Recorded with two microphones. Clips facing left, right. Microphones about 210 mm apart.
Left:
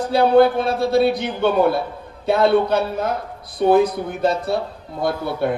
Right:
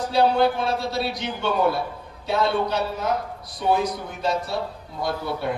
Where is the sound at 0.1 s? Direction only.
55° left (ahead or behind).